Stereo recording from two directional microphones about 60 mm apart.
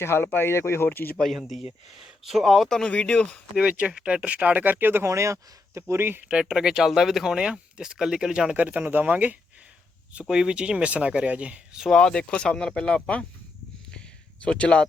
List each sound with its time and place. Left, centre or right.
0.0 s speech: left
1.4 s speech: centre
2.6 s speech: centre
3.6 s speech: centre; by 5.0 s right
5.0 s speech: right
5.9 s speech: right
6.2 s speech: centre
8.5 s speech: right
10.1 s speech: centre
11.9 s speech: centre
14.4 s speech: centre